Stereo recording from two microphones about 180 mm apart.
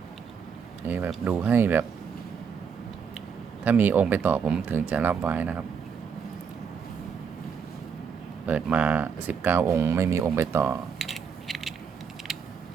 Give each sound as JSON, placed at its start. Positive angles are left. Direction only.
{"t": 0.9, "sound": "speech", "side_deg": -10}
{"t": 3.6, "sound": "speech", "side_deg": -10}
{"t": 8.4, "sound": "speech", "side_deg": -10}
{"t": 10.9, "sound": "mechanisms", "side_deg": 0}